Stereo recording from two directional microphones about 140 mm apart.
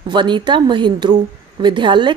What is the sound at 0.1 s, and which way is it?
Speech, 35° right (ahead or behind).